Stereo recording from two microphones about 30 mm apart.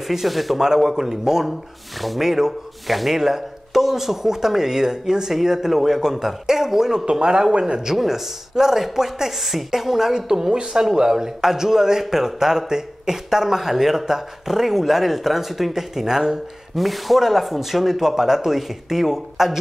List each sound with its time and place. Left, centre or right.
0.1 s speech: centre
0.6 s a man's voice: centre
7.1 s speech: right
7.8 s a man's voice: centre